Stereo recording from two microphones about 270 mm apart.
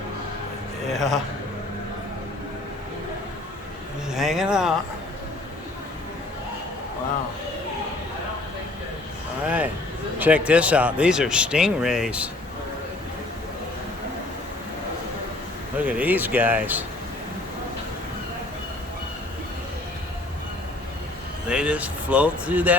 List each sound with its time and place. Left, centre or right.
0.9 s speech: centre
4.1 s speech: centre
10.2 s speech: centre
15.8 s speech: centre
21.5 s speech: centre